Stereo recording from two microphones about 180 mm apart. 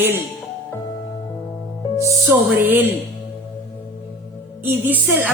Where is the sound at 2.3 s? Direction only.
10° right (ahead or behind).